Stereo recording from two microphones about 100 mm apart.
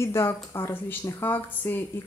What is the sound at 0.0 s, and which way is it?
Speech, 25° left (ahead or behind).